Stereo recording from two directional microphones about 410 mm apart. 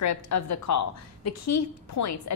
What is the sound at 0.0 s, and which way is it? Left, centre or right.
A woman's voice, left.